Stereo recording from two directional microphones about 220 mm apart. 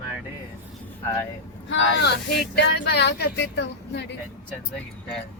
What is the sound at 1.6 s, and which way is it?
Speech, 50° left (ahead or behind).